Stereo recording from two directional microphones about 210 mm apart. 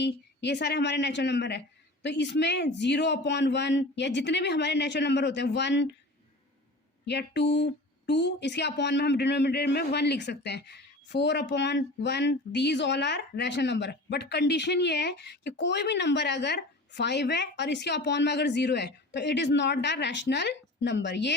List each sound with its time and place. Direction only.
0.0 s speech: 55° left (ahead or behind)
7.0 s speech: 55° left (ahead or behind)